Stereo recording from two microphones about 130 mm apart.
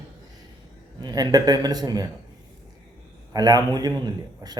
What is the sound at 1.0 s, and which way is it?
Speech, 30° right (ahead or behind).